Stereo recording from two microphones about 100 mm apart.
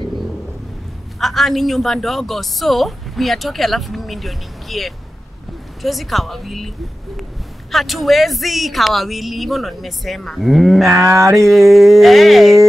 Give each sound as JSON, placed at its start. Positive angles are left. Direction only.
{"t": 1.2, "sound": "speech", "side_deg": 0}
{"t": 7.7, "sound": "speech", "side_deg": 0}
{"t": 11.0, "sound": "a sound", "side_deg": -30}
{"t": 11.3, "sound": "speech", "side_deg": 0}